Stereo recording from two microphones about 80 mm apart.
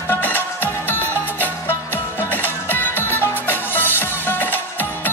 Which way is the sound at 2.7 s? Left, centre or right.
Left.